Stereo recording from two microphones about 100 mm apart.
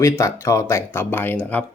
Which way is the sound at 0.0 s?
30° left (ahead or behind).